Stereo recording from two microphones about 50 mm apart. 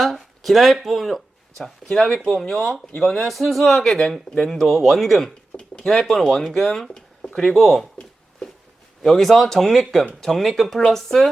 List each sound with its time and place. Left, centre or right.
0.0 s speech: centre
5.5 s a sound: centre
5.9 s speech: centre
9.0 s speech: centre